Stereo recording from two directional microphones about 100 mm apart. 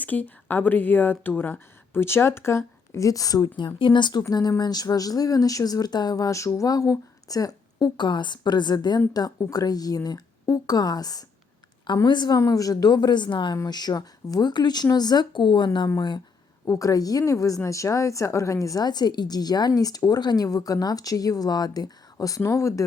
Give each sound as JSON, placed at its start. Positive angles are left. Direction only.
{"t": 0.0, "sound": "speech", "side_deg": 15}
{"t": 3.8, "sound": "a woman's voice", "side_deg": 55}
{"t": 12.4, "sound": "speech", "side_deg": 35}
{"t": 16.6, "sound": "a woman's voice", "side_deg": 35}